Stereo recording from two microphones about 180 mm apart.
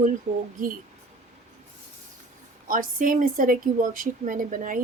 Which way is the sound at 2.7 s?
50° right (ahead or behind).